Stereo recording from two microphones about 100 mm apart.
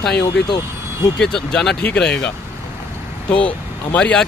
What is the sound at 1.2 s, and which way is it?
Speech, 5° left (ahead or behind).